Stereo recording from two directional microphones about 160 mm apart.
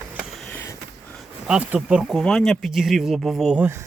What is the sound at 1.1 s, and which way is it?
Speech, centre (ahead or behind).